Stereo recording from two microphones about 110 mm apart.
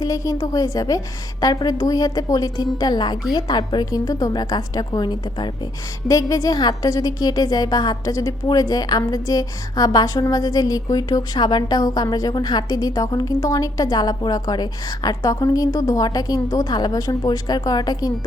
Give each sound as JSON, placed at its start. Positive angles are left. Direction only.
{"t": 0.0, "sound": "a woman's voice", "side_deg": 30}
{"t": 6.1, "sound": "a woman's voice", "side_deg": 30}